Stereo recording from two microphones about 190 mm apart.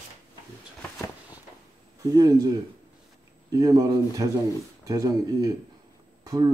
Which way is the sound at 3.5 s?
20° right (ahead or behind).